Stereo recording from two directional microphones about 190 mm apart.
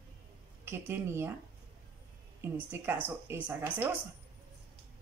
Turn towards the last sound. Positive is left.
turn(degrees=-10)  # may be behind; listen again after turning